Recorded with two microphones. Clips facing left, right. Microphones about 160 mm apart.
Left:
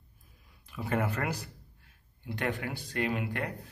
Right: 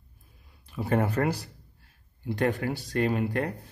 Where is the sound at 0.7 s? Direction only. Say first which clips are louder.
Right 5 dB; 35° right (ahead or behind).